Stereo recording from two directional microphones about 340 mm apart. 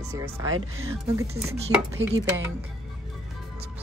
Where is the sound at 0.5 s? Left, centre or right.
Right.